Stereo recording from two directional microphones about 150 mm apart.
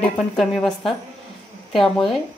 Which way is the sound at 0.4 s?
Centre (ahead or behind).